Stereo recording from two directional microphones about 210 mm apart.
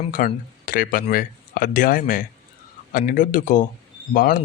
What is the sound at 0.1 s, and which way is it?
Speech, 40° left (ahead or behind).